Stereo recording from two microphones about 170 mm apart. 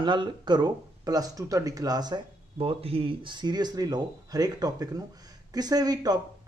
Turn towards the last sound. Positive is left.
turn(degrees=-20)  # may be behind; listen again after turning